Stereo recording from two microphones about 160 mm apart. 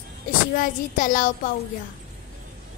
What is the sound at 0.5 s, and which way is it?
Child singing, 55° left (ahead or behind).